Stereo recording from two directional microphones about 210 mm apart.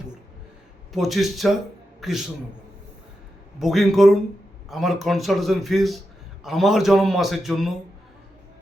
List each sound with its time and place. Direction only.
0.9 s a man's voice: centre (ahead or behind)
3.6 s a man's voice: centre (ahead or behind)